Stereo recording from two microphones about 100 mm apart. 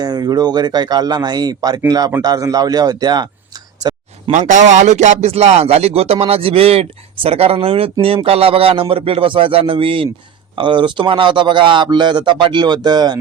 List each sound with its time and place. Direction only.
0.0 s speech: 40° right (ahead or behind)
4.3 s speech: 55° right (ahead or behind)
5.2 s a man's voice: 90° right; by 13.1 s 45° right (ahead or behind)